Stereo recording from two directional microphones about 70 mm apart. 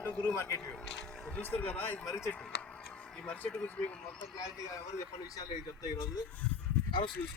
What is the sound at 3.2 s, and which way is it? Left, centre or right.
Speech, left.